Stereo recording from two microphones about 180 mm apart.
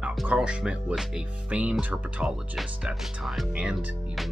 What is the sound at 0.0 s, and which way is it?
Speech, 5° right (ahead or behind).